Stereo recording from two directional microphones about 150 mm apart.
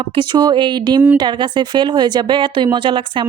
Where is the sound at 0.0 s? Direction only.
35° right (ahead or behind).